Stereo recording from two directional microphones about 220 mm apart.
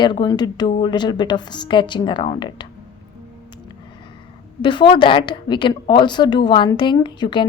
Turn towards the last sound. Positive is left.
turn(degrees=20)  # may be behind; listen again after turning